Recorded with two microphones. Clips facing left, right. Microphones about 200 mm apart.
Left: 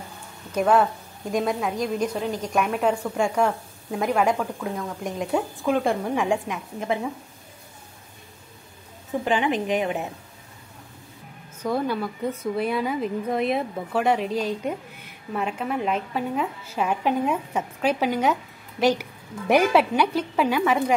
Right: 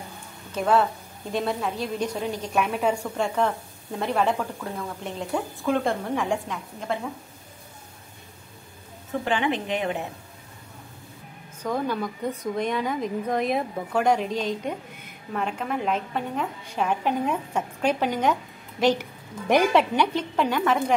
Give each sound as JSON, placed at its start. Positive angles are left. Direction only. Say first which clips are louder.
{"t": 1.3, "sound": "a woman's voice", "louder": "left 2 dB", "side_deg": 10}
{"t": 9.2, "sound": "a woman's voice", "louder": "left 2 dB", "side_deg": 15}
{"t": 11.6, "sound": "a woman's voice", "louder": "left 2 dB", "side_deg": 10}